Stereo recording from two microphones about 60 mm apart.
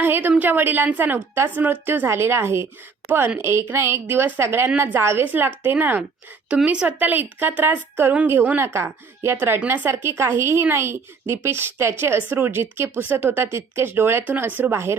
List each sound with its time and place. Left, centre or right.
0.0 s a woman's voice: right
5.2 s a woman's voice: right
8.6 s a woman's voice: right
14.7 s a woman's voice: right